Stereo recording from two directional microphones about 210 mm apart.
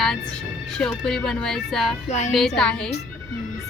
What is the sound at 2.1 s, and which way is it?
Speech, 35° left (ahead or behind).